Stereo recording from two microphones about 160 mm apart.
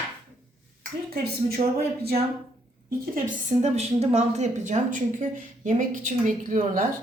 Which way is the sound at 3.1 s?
50° right (ahead or behind).